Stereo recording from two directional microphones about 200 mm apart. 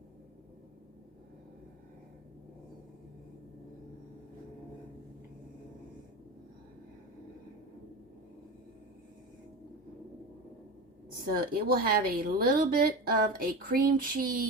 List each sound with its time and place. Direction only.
11.3 s a woman's voice: 50° right (ahead or behind)